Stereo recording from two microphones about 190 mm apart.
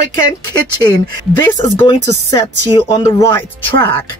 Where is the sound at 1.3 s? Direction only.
15° left (ahead or behind).